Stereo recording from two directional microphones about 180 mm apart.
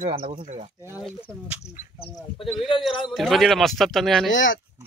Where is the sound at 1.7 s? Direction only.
50° left (ahead or behind).